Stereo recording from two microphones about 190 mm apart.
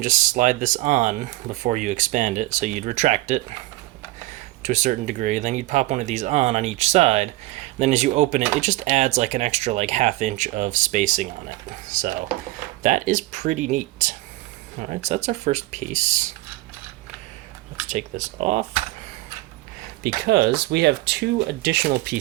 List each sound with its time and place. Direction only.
0.0 s speech: 40° right (ahead or behind)
17.8 s speech: 40° right (ahead or behind)
20.2 s speech: 60° right (ahead or behind)